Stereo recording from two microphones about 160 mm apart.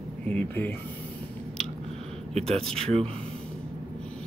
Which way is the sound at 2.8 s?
40° right (ahead or behind).